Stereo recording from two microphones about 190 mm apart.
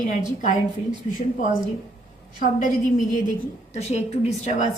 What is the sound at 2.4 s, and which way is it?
Speech, 45° left (ahead or behind).